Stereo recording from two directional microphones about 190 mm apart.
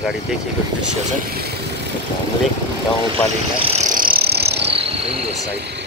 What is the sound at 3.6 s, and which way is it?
Vehicle, 35° right (ahead or behind).